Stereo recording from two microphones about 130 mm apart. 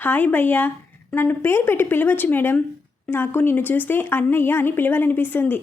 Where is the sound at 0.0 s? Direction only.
15° left (ahead or behind).